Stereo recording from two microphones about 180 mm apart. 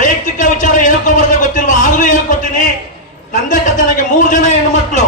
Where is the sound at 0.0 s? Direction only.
45° left (ahead or behind).